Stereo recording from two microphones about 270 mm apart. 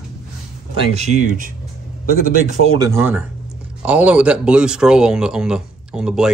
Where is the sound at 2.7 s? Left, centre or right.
Centre.